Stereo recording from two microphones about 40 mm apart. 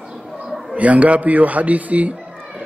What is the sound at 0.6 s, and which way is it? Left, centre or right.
Speech, right.